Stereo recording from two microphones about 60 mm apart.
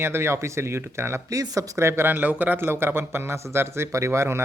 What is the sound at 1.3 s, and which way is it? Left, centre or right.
Speech, right.